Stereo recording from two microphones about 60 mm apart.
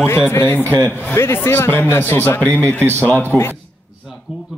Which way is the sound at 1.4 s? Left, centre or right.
Left.